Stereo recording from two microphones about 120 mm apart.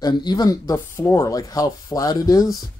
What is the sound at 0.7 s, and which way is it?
Speech, 20° left (ahead or behind).